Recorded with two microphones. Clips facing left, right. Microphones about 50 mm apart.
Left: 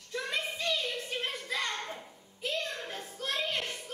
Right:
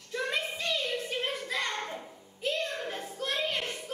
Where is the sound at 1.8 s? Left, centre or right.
Centre.